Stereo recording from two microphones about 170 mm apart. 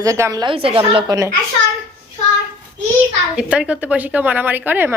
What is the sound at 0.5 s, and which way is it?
Speech, 30° right (ahead or behind).